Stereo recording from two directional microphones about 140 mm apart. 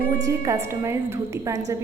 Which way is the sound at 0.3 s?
20° right (ahead or behind).